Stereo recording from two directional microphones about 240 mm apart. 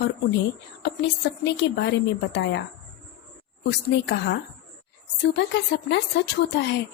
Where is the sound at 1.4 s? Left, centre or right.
Left.